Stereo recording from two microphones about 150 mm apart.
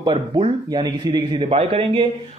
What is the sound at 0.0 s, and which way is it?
A man's voice, 35° right (ahead or behind).